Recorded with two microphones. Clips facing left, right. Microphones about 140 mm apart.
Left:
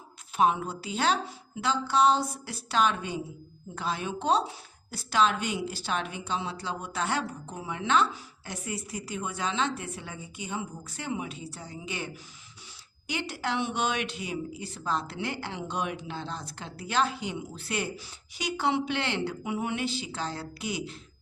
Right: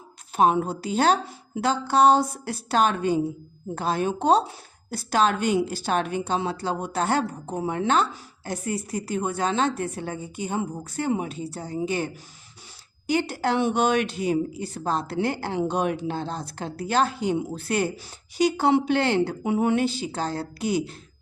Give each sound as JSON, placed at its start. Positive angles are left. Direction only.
{"t": 0.3, "sound": "speech", "side_deg": -45}